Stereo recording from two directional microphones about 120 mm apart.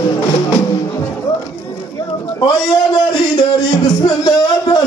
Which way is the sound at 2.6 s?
35° left (ahead or behind).